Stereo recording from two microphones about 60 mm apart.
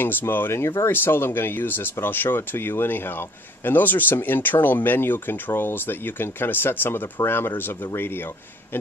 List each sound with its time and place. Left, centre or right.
0.0 s speech: left